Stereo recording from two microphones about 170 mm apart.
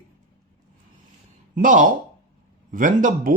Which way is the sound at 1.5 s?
50° right (ahead or behind).